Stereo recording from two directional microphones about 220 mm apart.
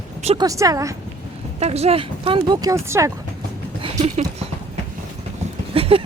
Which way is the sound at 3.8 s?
25° right (ahead or behind).